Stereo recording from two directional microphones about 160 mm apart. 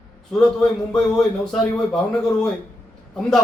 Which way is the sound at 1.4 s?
5° left (ahead or behind).